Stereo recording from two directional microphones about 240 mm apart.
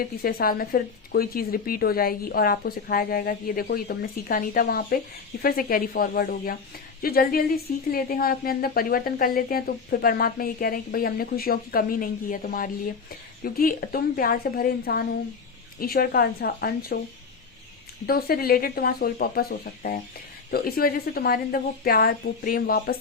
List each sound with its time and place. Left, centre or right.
0.0 s a woman's voice: left
18.0 s a woman's voice: left